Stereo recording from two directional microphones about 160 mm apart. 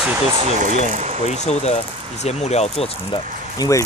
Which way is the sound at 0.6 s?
50° right (ahead or behind).